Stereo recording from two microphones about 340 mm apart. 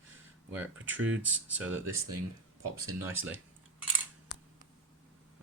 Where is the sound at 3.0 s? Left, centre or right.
Centre.